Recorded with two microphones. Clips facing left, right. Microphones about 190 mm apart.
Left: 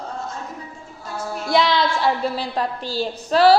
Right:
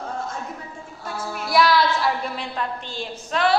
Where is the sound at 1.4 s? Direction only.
25° left (ahead or behind).